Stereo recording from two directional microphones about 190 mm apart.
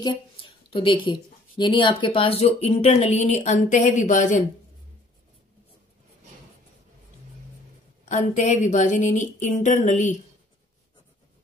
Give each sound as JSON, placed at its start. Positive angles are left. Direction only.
{"t": 0.0, "sound": "a sound", "side_deg": 30}
{"t": 1.6, "sound": "speech", "side_deg": 25}
{"t": 8.0, "sound": "speech", "side_deg": 40}